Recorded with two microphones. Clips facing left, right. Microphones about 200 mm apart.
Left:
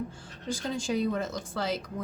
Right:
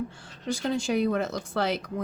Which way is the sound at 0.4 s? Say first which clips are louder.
Right 4 dB; 70° right (ahead or behind).